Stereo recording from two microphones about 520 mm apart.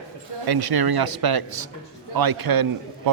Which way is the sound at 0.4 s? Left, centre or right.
Right.